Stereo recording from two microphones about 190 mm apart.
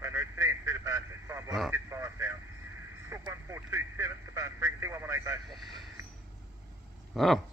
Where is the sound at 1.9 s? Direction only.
15° right (ahead or behind).